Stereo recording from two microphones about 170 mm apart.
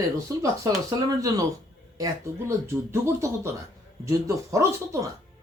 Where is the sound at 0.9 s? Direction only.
20° right (ahead or behind).